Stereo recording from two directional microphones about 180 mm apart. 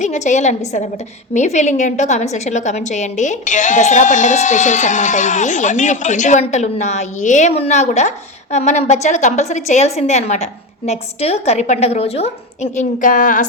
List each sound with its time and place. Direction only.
0.0 s a woman's voice: 40° left (ahead or behind)